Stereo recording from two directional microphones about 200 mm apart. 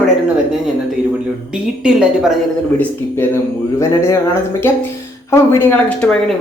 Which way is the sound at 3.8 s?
15° left (ahead or behind).